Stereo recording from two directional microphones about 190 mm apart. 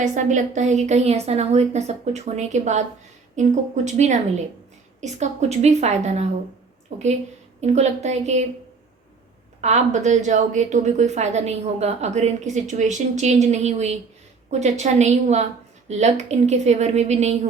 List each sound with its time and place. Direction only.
0.0 s a woman's voice: 40° right (ahead or behind)
9.6 s a woman's voice: 40° right (ahead or behind)